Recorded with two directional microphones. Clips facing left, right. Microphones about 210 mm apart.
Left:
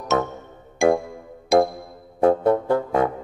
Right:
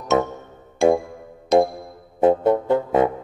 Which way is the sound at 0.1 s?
20° right (ahead or behind).